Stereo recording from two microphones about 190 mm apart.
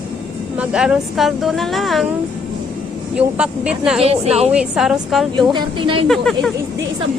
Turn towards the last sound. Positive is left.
turn(degrees=0)  # may be behind; listen again after turning